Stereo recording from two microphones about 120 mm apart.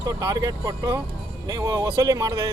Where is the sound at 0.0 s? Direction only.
30° right (ahead or behind).